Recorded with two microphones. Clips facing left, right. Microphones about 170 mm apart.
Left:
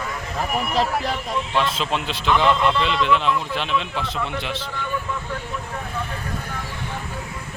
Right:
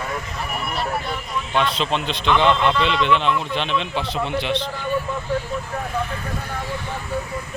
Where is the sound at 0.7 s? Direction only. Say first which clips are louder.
Left 3 dB; 90° left.